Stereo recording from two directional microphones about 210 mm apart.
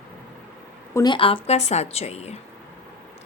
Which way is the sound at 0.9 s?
20° left (ahead or behind).